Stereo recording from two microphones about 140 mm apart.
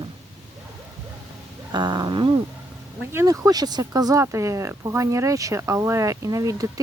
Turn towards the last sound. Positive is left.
turn(degrees=-25)  # may be behind; listen again after turning